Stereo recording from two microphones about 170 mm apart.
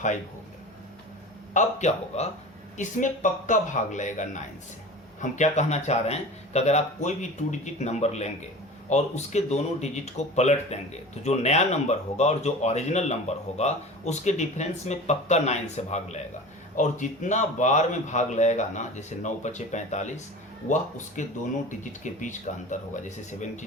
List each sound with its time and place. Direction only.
1.5 s a man's voice: 40° left (ahead or behind)